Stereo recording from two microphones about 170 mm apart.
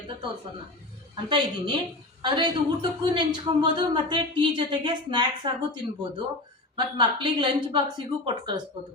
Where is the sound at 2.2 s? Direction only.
30° right (ahead or behind).